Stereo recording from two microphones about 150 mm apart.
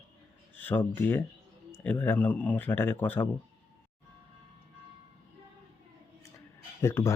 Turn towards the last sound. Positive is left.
turn(degrees=20)  # may be behind; listen again after turning